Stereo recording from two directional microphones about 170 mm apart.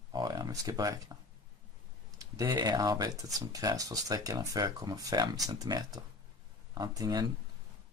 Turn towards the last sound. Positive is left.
turn(degrees=-25)  # may be behind; listen again after turning